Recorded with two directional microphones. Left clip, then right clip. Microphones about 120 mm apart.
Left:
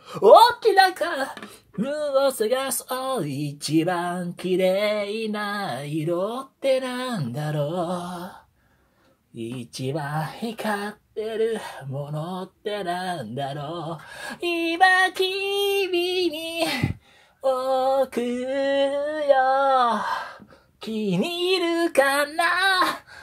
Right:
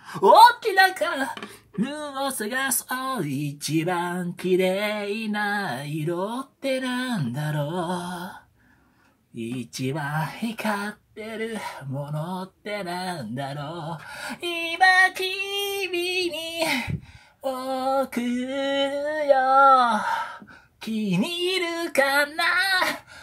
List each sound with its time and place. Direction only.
0.1 s a woman's voice: 15° left (ahead or behind)
0.7 s a woman's voice: 35° left (ahead or behind)
1.8 s speech: 20° left (ahead or behind)
9.4 s speech: 15° left (ahead or behind)
21.2 s speech: 25° left (ahead or behind)